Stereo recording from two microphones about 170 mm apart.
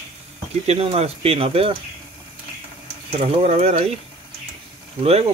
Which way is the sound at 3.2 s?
35° right (ahead or behind).